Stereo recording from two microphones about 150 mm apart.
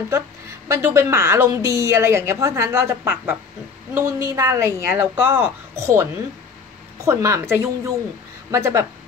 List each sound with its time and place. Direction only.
0.1 s a woman's voice: 20° right (ahead or behind)